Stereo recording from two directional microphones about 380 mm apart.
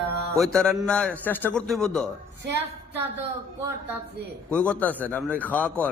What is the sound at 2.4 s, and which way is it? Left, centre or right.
Speech, right.